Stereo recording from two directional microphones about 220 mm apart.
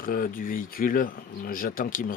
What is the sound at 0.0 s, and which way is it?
Speech, 40° left (ahead or behind).